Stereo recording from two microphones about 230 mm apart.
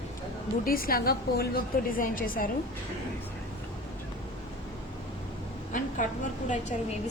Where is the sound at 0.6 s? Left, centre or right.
Left.